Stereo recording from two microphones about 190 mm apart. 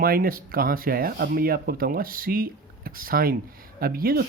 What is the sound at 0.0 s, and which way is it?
Speech, 50° right (ahead or behind).